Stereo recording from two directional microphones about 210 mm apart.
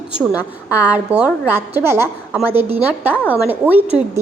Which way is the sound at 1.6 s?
10° right (ahead or behind).